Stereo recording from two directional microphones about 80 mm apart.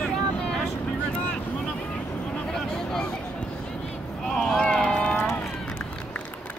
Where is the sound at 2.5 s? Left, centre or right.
Centre.